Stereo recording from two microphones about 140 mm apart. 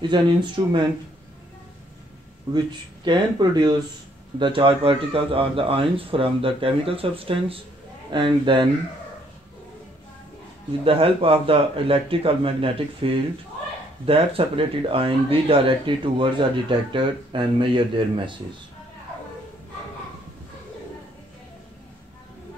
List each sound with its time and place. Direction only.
0.0 s speech: 35° right (ahead or behind)
2.5 s speech: 30° right (ahead or behind)
10.8 s speech: 40° right (ahead or behind)